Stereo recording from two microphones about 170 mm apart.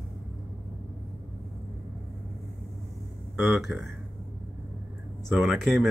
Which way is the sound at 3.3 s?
Centre (ahead or behind).